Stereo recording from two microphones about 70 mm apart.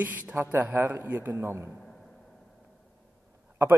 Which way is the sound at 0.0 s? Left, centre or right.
Right.